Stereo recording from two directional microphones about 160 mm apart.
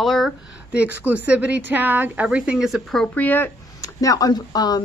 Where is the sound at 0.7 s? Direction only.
10° right (ahead or behind); by 3.5 s 10° left (ahead or behind).